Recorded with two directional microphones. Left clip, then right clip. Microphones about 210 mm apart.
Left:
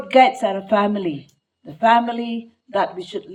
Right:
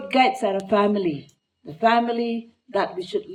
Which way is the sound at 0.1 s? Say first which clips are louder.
Left 5 dB; 35° left (ahead or behind).